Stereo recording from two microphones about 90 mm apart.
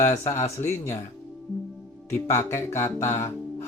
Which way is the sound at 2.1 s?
30° left (ahead or behind).